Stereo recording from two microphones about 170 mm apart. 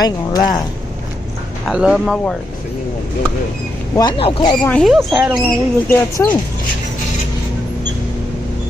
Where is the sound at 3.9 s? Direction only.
25° left (ahead or behind).